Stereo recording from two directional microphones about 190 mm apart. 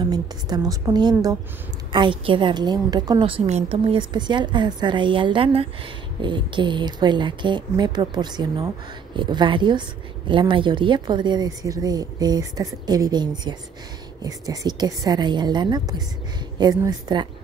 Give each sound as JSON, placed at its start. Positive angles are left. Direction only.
{"t": 0.0, "sound": "speech", "side_deg": -20}